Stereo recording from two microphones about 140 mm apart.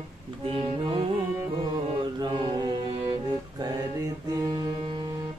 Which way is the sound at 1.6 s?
30° right (ahead or behind).